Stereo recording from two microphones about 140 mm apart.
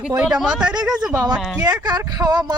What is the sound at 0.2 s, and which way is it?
Speech, 5° right (ahead or behind).